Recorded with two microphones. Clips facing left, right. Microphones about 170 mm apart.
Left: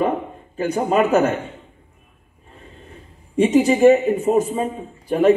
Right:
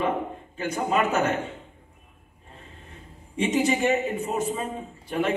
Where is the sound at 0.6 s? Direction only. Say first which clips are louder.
Left 7 dB; 40° left (ahead or behind).